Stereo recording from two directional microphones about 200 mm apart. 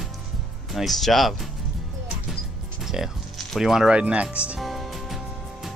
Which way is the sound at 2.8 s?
Centre (ahead or behind).